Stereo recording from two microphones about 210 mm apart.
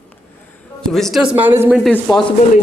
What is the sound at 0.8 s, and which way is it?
Speech, centre (ahead or behind).